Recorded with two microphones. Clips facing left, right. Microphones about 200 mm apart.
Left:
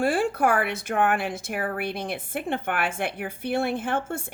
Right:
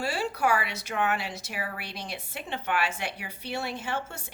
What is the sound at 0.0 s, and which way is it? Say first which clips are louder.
A woman's voice: left 6 dB; 50° left (ahead or behind).